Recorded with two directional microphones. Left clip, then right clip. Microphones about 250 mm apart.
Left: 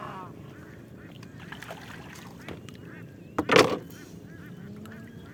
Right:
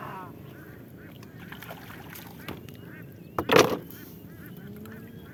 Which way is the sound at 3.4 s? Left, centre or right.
Centre.